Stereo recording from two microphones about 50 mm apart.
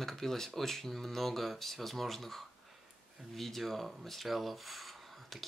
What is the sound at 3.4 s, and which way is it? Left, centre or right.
Speech, centre.